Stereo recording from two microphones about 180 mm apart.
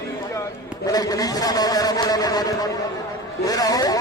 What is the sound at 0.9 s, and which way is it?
A man's voice, 20° left (ahead or behind).